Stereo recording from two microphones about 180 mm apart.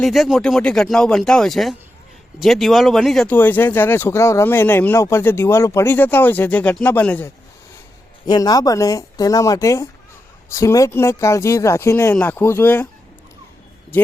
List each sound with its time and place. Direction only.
0.0 s speech: centre (ahead or behind)
8.3 s speech: 20° left (ahead or behind)
13.9 s speech: 10° left (ahead or behind)